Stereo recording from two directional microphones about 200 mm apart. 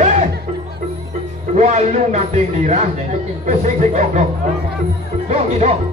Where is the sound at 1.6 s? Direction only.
35° right (ahead or behind).